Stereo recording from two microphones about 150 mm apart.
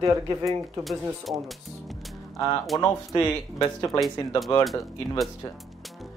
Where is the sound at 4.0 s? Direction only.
Centre (ahead or behind).